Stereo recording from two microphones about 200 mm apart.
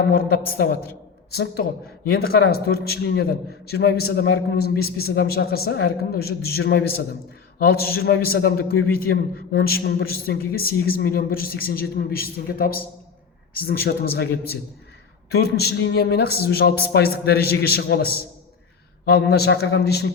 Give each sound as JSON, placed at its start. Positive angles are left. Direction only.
{"t": 0.1, "sound": "a man's voice", "side_deg": 50}
{"t": 2.1, "sound": "a man's voice", "side_deg": 50}
{"t": 15.3, "sound": "a man's voice", "side_deg": 55}